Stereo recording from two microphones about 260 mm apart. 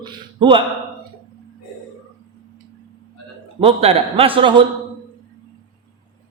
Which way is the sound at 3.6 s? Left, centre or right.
Right.